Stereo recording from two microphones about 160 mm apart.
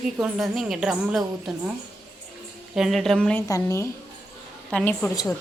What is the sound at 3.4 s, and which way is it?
Speech, 20° left (ahead or behind).